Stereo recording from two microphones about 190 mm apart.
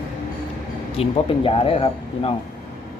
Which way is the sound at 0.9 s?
30° left (ahead or behind).